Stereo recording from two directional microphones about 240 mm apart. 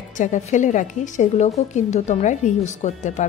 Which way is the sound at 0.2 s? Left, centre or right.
Left.